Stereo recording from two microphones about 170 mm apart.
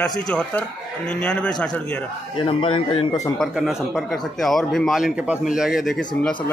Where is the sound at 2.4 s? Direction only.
30° left (ahead or behind).